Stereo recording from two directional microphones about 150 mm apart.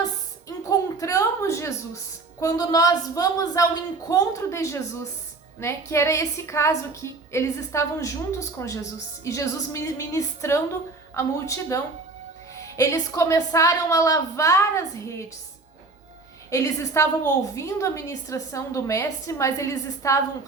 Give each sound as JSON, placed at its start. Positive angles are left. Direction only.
{"t": 0.4, "sound": "a sound", "side_deg": 20}
{"t": 2.4, "sound": "a woman's voice", "side_deg": 25}
{"t": 16.5, "sound": "a woman's voice", "side_deg": 20}